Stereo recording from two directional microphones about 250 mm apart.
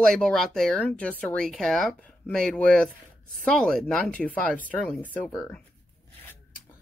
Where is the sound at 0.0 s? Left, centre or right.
Centre.